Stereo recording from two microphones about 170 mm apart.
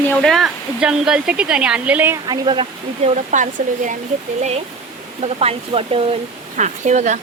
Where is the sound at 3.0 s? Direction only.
45° right (ahead or behind).